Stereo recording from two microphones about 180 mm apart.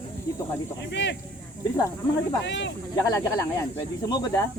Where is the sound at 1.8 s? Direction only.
15° left (ahead or behind).